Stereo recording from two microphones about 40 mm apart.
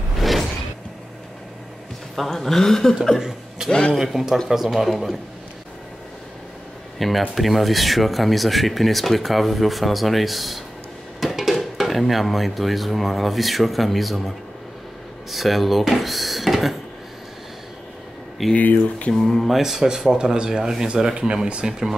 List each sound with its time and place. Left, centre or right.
0.2 s music: centre
2.1 s speech: centre
3.2 s speech: centre
7.0 s speech: centre
15.3 s speech: centre
18.6 s speech: left
19.4 s speech: centre; by 21.7 s right